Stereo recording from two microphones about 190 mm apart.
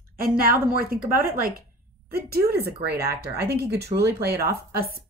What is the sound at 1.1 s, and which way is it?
A woman's voice, 50° right (ahead or behind).